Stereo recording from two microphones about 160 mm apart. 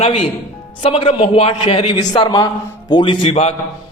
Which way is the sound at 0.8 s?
35° left (ahead or behind).